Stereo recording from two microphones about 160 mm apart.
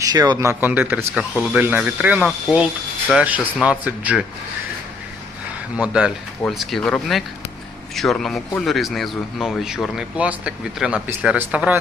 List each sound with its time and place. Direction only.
0.0 s speech: 25° right (ahead or behind); by 4.2 s 10° right (ahead or behind)
5.7 s speech: 5° right (ahead or behind)